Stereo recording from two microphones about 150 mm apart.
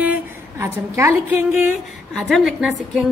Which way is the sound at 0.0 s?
15° right (ahead or behind).